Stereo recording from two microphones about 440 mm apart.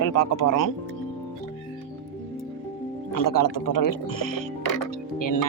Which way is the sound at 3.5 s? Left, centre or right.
Left.